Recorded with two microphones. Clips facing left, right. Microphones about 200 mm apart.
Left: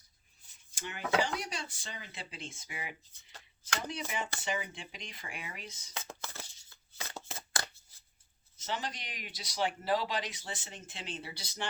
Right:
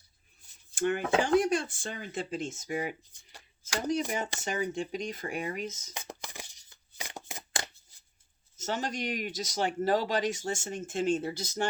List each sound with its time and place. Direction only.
0.8 s speech: 50° right (ahead or behind)
5.9 s a sound: 15° right (ahead or behind)
7.3 s shuffling cards: 15° right (ahead or behind)
8.5 s speech: 45° right (ahead or behind)